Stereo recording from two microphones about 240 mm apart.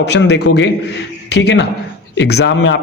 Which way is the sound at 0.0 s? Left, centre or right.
Left.